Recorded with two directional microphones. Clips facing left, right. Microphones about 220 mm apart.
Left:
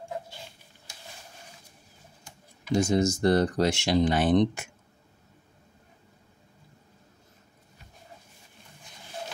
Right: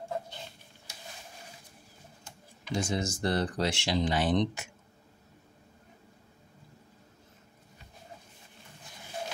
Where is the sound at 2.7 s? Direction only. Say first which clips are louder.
Left 8 dB; 40° left (ahead or behind).